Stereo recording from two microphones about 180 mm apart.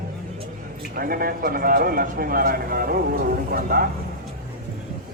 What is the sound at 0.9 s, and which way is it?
Speech, 55° right (ahead or behind).